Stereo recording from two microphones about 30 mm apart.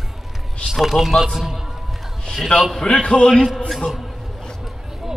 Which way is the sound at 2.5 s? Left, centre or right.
Left.